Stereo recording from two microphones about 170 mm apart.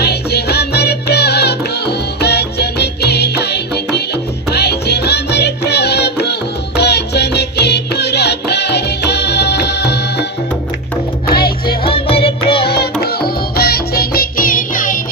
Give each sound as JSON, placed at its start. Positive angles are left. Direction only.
{"t": 0.0, "sound": "music", "side_deg": 70}
{"t": 11.3, "sound": "music", "side_deg": 60}
{"t": 11.8, "sound": "music", "side_deg": 30}
{"t": 12.6, "sound": "music", "side_deg": 70}